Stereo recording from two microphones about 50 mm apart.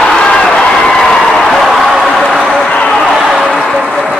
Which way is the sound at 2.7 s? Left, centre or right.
Centre.